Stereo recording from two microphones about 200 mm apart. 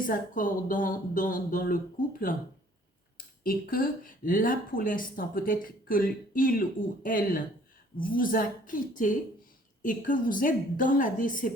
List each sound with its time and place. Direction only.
0.0 s speech: 40° left (ahead or behind)
3.4 s speech: 45° left (ahead or behind)